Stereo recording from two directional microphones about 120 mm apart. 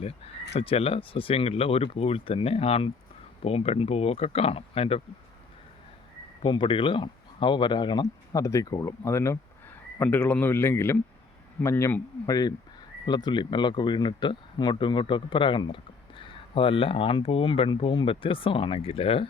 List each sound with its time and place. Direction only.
0.5 s speech: 50° left (ahead or behind)
6.4 s speech: 45° left (ahead or behind)
8.4 s speech: 25° left (ahead or behind)
12.2 s speech: 30° left (ahead or behind); by 19.3 s 50° left (ahead or behind)